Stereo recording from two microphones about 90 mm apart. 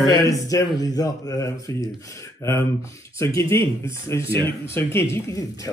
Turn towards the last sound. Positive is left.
turn(degrees=35)  # may be behind; listen again after turning